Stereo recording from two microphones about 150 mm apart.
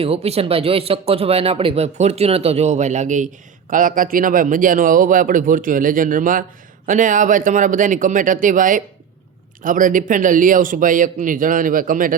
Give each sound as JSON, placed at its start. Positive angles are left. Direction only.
{"t": 0.0, "sound": "a man's voice", "side_deg": -45}